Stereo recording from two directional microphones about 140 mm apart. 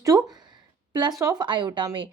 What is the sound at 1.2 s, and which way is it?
Speech, 30° right (ahead or behind).